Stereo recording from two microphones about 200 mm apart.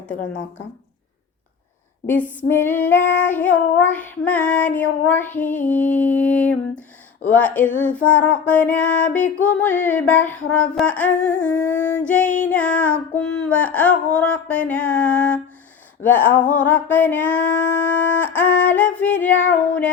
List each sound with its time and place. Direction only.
2.5 s music: 10° left (ahead or behind)
5.5 s a sound: 40° left (ahead or behind)
6.0 s music: 5° left (ahead or behind)